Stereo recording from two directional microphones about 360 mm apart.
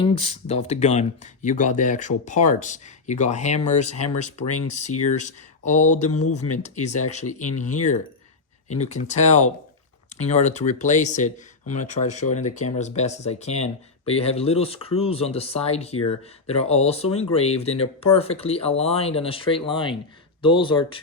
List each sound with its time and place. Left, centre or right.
0.0 s speech: centre
5.0 s speech: centre
6.1 s speech: left
7.1 s speech: centre